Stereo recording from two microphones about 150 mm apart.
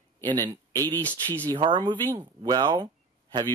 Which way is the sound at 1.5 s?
30° right (ahead or behind).